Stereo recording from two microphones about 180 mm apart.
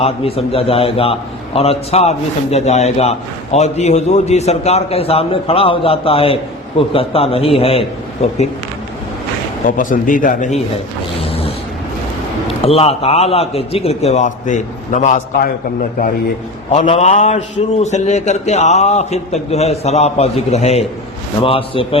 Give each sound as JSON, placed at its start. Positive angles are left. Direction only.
{"t": 0.0, "sound": "a man's voice", "side_deg": 35}
{"t": 9.6, "sound": "a man's voice", "side_deg": 50}
{"t": 11.2, "sound": "a sound", "side_deg": 30}
{"t": 12.6, "sound": "a man's voice", "side_deg": 35}
{"t": 16.8, "sound": "a man's voice", "side_deg": 35}